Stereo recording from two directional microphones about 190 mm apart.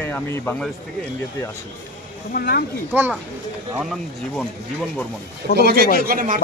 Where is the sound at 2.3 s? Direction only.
50° left (ahead or behind).